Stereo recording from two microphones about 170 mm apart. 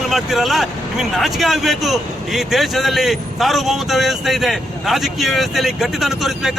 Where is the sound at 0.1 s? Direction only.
Centre (ahead or behind).